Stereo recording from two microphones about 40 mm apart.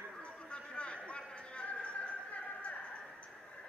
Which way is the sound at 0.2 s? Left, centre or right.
Left.